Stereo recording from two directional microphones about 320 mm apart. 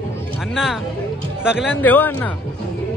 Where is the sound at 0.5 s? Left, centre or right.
Centre.